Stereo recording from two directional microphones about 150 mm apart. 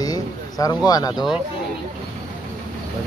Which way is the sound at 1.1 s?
Centre (ahead or behind).